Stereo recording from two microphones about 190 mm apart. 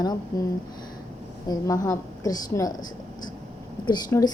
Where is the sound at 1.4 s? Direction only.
20° left (ahead or behind).